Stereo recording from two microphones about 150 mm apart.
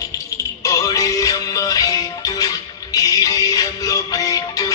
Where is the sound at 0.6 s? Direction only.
20° left (ahead or behind).